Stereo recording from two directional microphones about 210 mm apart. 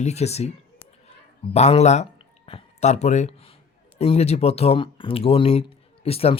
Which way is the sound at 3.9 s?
30° left (ahead or behind).